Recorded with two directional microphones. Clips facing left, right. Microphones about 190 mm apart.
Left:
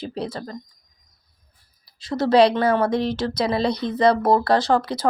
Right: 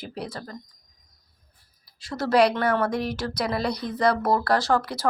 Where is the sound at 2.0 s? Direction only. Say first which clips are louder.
Left 4 dB; 20° left (ahead or behind).